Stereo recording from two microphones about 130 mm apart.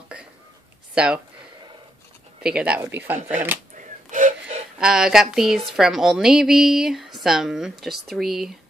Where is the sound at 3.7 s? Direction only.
70° right (ahead or behind).